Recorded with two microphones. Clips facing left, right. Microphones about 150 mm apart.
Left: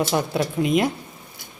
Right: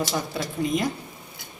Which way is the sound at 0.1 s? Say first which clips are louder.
Left 6 dB; 65° left (ahead or behind).